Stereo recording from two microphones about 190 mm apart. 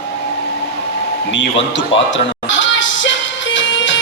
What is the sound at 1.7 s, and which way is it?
Music, 75° left (ahead or behind).